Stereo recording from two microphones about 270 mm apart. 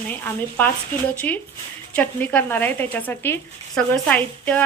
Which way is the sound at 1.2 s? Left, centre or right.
Centre.